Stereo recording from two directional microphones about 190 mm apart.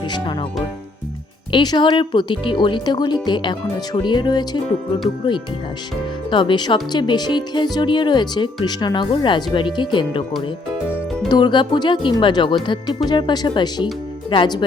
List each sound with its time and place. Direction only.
1.5 s speech: 25° left (ahead or behind)
6.3 s speech: 25° left (ahead or behind)
11.3 s speech: 25° left (ahead or behind)